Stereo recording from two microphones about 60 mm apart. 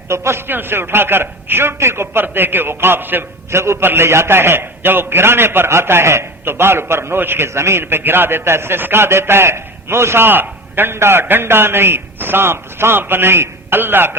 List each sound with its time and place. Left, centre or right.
0.1 s a man's voice: right
3.5 s a man's voice: right